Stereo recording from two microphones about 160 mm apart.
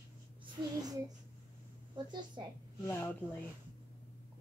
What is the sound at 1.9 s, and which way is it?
Speech, 30° right (ahead or behind).